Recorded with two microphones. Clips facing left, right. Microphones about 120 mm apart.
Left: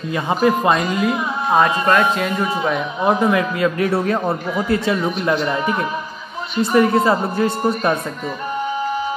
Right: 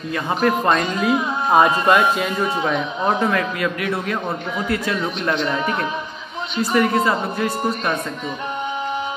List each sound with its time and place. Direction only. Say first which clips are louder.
0.3 s a man's voice: left 2 dB; 10° left (ahead or behind)
3.3 s speech: left 4 dB; 15° left (ahead or behind)
3.8 s speech: left 5 dB; 35° left (ahead or behind)
5.0 s speech: left 3 dB; 5° left (ahead or behind)
6.6 s speech: left 3 dB; 30° left (ahead or behind)